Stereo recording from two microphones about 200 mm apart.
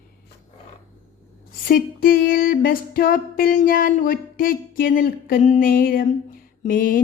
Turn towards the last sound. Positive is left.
turn(degrees=45)  # may be behind; listen again after turning